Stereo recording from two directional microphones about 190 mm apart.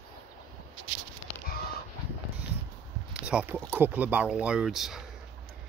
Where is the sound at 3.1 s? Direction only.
5° right (ahead or behind).